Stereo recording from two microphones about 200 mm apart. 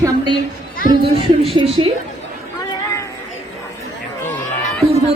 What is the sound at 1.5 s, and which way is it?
Speech, 25° right (ahead or behind).